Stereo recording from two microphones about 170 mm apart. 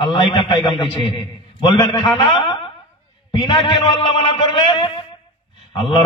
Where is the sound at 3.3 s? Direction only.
30° left (ahead or behind).